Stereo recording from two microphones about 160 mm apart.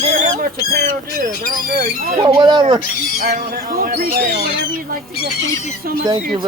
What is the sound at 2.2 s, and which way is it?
Speech, 25° right (ahead or behind).